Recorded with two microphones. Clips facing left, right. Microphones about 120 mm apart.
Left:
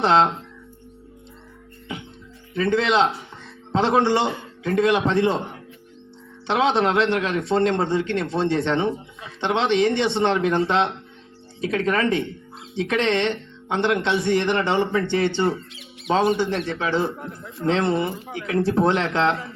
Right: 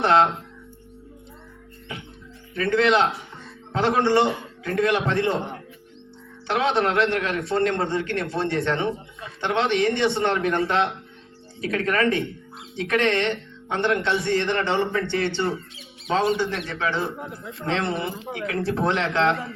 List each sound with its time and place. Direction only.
0.0 s a man's voice: 25° left (ahead or behind)
2.6 s a man's voice: 30° left (ahead or behind)
3.2 s music: 25° left (ahead or behind)
4.6 s a man's voice: 25° left (ahead or behind)
6.5 s a man's voice: 25° left (ahead or behind)
16.6 s a man's voice: 30° left (ahead or behind)
17.1 s a man's voice: 5° right (ahead or behind)
17.7 s a man's voice: 30° left (ahead or behind)